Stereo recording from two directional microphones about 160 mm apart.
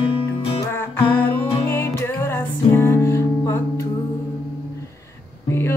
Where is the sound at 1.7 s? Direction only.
15° left (ahead or behind).